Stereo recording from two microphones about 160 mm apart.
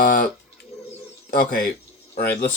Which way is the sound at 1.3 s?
65° left (ahead or behind).